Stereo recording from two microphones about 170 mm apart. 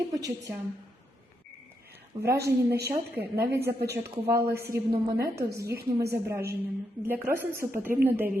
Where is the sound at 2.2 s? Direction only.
70° right (ahead or behind).